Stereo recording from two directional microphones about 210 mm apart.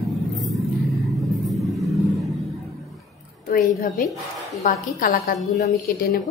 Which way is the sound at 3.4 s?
40° left (ahead or behind).